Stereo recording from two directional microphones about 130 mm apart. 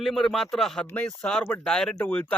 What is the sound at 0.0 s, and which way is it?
Speech, centre (ahead or behind).